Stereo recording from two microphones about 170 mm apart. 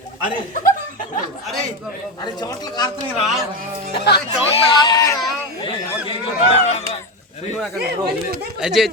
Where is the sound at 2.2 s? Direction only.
25° left (ahead or behind).